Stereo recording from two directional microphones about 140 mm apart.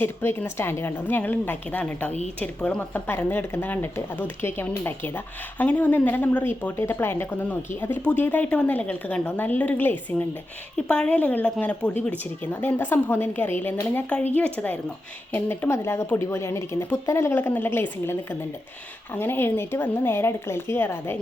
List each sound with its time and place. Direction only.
0.0 s speech: 15° left (ahead or behind)